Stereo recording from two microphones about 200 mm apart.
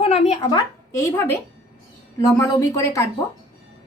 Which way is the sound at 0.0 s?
30° left (ahead or behind).